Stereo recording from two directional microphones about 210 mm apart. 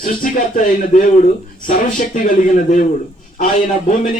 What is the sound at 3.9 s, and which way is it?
Speech, 35° left (ahead or behind).